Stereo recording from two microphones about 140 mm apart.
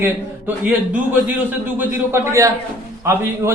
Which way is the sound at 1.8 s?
20° right (ahead or behind).